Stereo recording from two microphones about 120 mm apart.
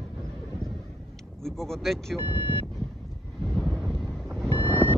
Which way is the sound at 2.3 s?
40° left (ahead or behind).